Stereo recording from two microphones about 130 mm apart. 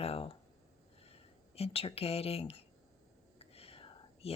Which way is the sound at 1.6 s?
50° left (ahead or behind).